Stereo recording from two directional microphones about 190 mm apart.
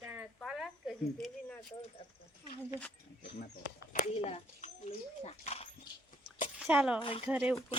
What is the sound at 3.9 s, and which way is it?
Speech, 35° left (ahead or behind).